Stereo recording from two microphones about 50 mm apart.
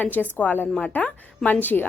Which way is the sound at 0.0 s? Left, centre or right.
Left.